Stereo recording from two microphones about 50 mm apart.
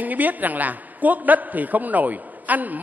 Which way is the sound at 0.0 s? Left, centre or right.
Right.